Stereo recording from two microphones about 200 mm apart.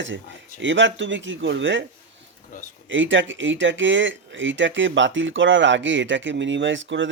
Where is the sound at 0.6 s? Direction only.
65° right (ahead or behind).